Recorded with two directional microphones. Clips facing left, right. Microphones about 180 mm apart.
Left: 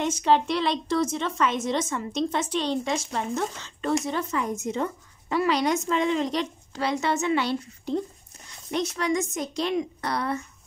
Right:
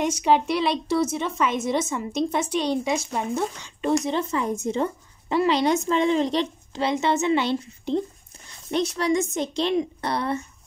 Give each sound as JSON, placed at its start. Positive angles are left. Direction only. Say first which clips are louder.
{"t": 0.0, "sound": "a woman's voice", "louder": "right 1 dB", "side_deg": -10}
{"t": 8.7, "sound": "speech", "louder": "right 3 dB", "side_deg": -35}